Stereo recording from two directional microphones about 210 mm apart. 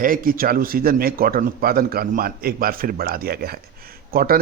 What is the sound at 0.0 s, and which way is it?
Speech, 40° right (ahead or behind).